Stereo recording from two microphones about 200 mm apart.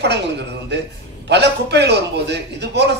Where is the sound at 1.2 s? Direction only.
60° right (ahead or behind).